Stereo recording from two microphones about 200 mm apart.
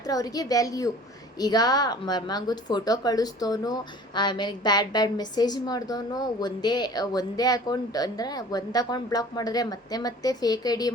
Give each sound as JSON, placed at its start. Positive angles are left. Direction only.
{"t": 0.1, "sound": "a woman's voice", "side_deg": 20}